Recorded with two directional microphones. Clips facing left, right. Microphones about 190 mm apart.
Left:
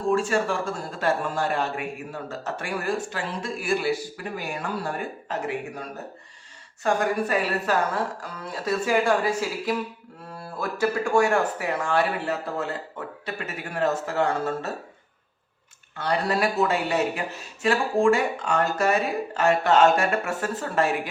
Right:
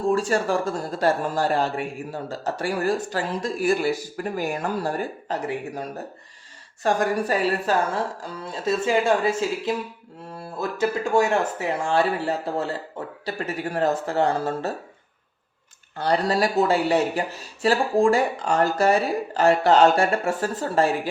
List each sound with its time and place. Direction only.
0.1 s a man's voice: 40° right (ahead or behind)
6.8 s a man's voice: 35° right (ahead or behind)
16.0 s a man's voice: 35° right (ahead or behind)